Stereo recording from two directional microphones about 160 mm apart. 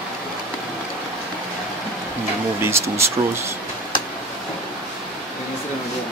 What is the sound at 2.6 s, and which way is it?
Speech, 15° right (ahead or behind).